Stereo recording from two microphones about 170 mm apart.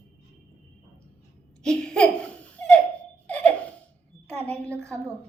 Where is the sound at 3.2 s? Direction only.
5° left (ahead or behind).